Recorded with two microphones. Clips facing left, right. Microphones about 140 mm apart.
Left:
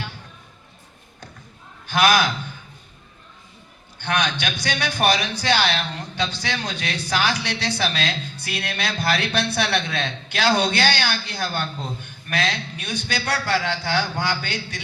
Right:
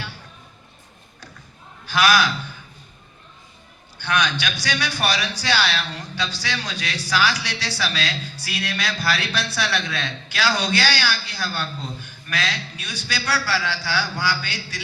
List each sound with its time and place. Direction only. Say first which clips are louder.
1.9 s a man's voice: left 1 dB; 50° left (ahead or behind)
4.0 s a man's voice: right 1 dB; 50° left (ahead or behind)